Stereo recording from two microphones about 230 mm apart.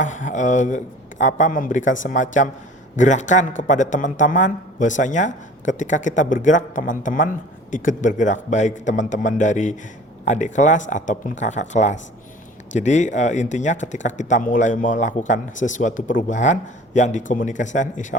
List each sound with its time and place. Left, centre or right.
0.0 s speech: left